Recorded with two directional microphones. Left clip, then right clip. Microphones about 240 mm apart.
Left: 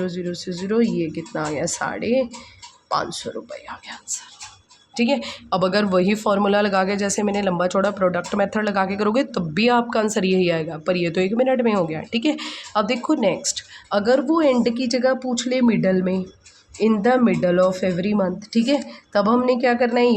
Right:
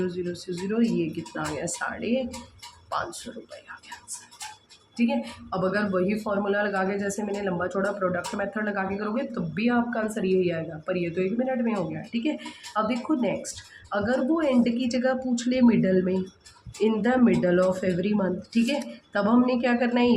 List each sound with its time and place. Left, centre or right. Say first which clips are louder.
0.0 s speech: left 3 dB; left
4.9 s a woman's voice: left 6 dB; left